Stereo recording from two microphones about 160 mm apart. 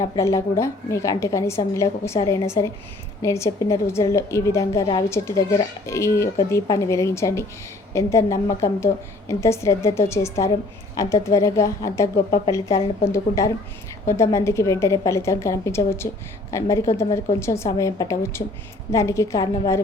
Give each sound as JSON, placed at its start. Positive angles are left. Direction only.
{"t": 0.0, "sound": "a child's voice", "side_deg": 20}
{"t": 13.1, "sound": "a child's voice", "side_deg": 20}